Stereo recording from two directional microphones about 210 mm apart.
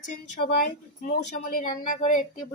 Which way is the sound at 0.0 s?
40° left (ahead or behind).